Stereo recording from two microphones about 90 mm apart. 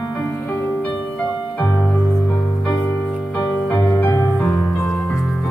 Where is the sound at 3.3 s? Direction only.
15° left (ahead or behind).